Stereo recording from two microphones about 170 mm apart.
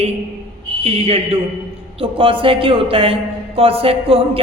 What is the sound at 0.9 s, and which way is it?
A man's voice, 40° right (ahead or behind).